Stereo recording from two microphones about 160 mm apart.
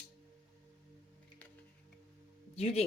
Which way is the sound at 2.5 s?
40° left (ahead or behind).